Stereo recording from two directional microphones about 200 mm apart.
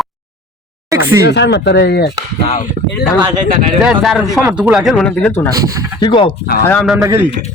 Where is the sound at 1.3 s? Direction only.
60° left (ahead or behind).